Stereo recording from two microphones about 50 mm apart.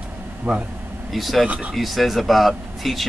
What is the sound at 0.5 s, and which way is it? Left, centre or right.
Speech, right.